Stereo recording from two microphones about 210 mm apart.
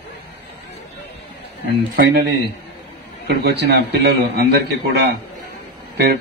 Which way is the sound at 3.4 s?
50° right (ahead or behind).